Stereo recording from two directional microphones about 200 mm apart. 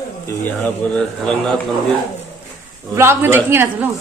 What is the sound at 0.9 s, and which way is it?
Speech, 5° left (ahead or behind).